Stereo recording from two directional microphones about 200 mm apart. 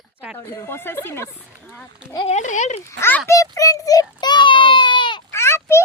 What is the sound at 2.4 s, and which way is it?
Speech, 40° left (ahead or behind).